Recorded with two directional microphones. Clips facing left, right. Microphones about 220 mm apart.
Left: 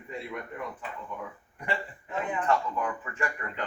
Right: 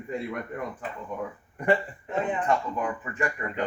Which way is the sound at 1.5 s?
50° right (ahead or behind).